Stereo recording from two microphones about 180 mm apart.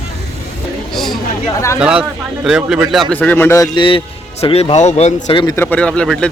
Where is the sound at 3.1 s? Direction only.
10° left (ahead or behind).